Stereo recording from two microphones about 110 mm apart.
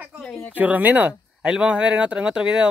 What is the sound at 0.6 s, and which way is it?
Speech, 15° right (ahead or behind).